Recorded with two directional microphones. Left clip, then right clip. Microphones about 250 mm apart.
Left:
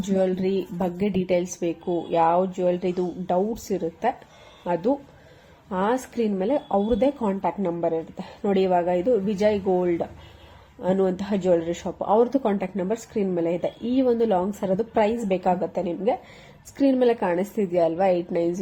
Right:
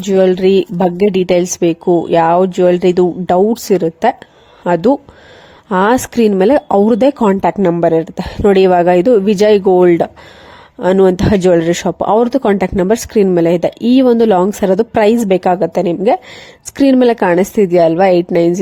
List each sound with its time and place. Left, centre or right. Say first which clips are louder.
0.0 s speech: right 13 dB; right